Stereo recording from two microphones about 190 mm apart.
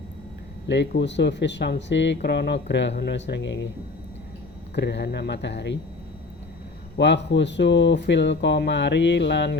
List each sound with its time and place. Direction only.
0.7 s speech: 65° left (ahead or behind)
4.7 s speech: 65° left (ahead or behind)
6.9 s speech: 65° left (ahead or behind)